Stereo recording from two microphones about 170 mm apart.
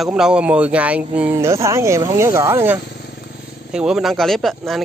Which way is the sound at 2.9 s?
75° left (ahead or behind).